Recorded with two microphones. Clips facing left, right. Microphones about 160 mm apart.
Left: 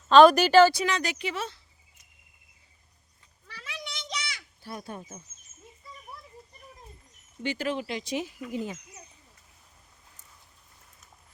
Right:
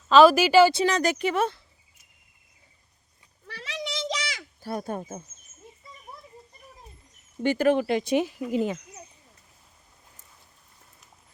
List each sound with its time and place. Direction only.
0.1 s speech: 5° right (ahead or behind)
0.9 s speech: 40° right (ahead or behind)
1.2 s speech: 50° right (ahead or behind)
3.5 s a sound: 80° right
4.6 s speech: 45° right (ahead or behind)
7.4 s speech: 50° right (ahead or behind)
8.5 s speech: 80° right